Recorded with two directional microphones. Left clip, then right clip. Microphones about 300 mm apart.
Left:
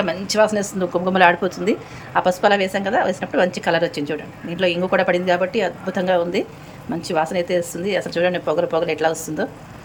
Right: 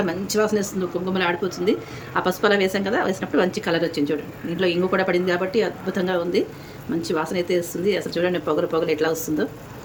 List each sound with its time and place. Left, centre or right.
0.0 s a woman's voice: centre